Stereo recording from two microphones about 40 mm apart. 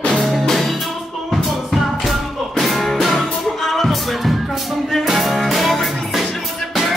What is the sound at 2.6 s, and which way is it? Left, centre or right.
Music, centre.